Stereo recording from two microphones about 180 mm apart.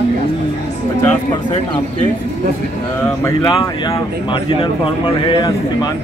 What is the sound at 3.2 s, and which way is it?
Speech, 20° left (ahead or behind).